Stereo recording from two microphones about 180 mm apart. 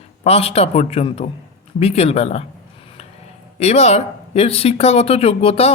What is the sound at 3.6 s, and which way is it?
Speech, 35° left (ahead or behind).